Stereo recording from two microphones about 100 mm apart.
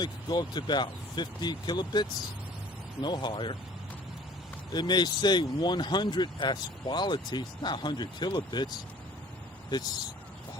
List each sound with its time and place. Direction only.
0.0 s speech: 50° left (ahead or behind)
4.7 s speech: 45° left (ahead or behind)